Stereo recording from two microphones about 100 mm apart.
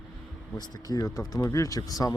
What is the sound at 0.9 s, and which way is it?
Speech, 40° left (ahead or behind).